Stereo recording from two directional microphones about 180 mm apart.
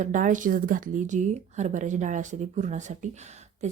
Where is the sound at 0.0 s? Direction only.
45° right (ahead or behind).